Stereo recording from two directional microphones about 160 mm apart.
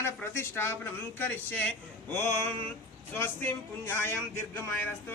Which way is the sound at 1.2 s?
10° left (ahead or behind).